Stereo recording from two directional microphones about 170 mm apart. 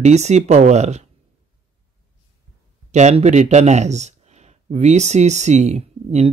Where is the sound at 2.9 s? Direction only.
40° right (ahead or behind).